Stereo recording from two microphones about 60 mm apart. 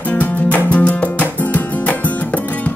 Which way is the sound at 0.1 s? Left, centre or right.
Left.